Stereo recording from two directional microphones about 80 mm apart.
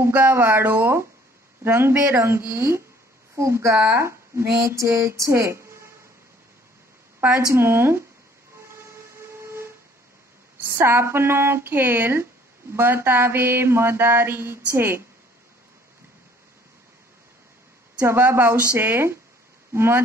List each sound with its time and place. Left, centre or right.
0.1 s mantra: right
2.1 s speech: right
7.2 s mantra: right
8.6 s train: right
10.6 s mantra: right
18.0 s mantra: right
19.7 s speech: right